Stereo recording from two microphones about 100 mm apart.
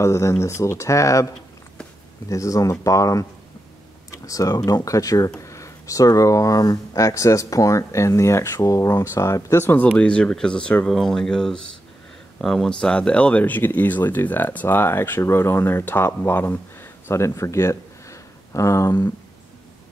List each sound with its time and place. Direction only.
0.0 s speech: 30° left (ahead or behind)
2.2 s speech: 35° left (ahead or behind)
4.1 s computer keyboard: 35° left (ahead or behind)
4.6 s speech: 35° left (ahead or behind)
9.9 s speech: 10° left (ahead or behind); by 19.0 s 30° left (ahead or behind)